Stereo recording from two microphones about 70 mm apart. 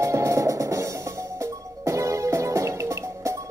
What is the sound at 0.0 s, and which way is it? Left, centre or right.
Music, right.